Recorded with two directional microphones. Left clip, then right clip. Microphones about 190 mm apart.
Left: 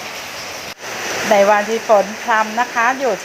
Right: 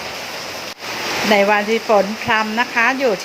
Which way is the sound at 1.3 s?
30° right (ahead or behind).